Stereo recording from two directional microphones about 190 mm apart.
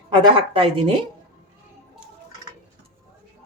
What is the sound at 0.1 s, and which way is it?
Speech, 25° right (ahead or behind).